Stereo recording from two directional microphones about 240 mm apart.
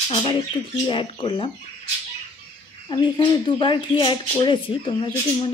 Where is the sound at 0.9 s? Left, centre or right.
Left.